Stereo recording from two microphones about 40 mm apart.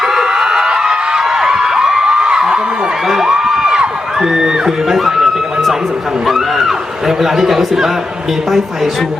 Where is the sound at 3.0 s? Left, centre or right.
Centre.